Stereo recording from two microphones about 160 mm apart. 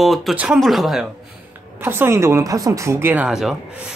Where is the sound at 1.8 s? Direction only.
15° right (ahead or behind).